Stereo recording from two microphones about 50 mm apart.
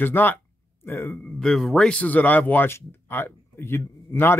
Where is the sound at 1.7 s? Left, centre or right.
Centre.